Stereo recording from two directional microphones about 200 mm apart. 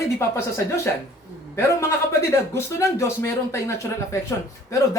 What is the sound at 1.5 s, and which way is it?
A man's voice, 15° left (ahead or behind).